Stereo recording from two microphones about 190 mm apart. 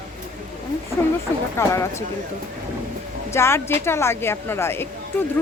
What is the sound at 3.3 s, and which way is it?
A woman's voice, 15° left (ahead or behind).